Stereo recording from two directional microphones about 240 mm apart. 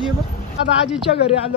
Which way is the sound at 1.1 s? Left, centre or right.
Left.